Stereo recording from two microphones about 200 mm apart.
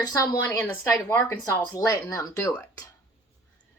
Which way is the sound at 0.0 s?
20° left (ahead or behind).